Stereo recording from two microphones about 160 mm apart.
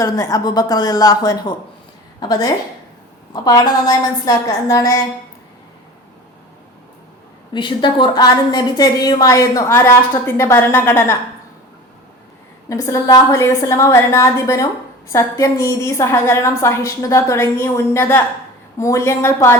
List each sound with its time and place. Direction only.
0.0 s a woman's voice: 20° left (ahead or behind)
7.5 s a woman's voice: 30° left (ahead or behind)
12.6 s a woman's voice: 20° left (ahead or behind)